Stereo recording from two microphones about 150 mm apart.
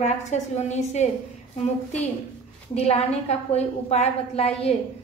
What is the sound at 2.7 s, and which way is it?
A woman's voice, 45° left (ahead or behind).